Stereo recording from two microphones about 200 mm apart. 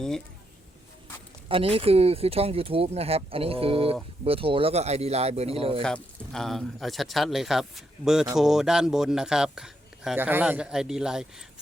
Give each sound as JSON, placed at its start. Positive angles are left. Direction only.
{"t": 1.5, "sound": "speech", "side_deg": -30}
{"t": 5.8, "sound": "speech", "side_deg": 5}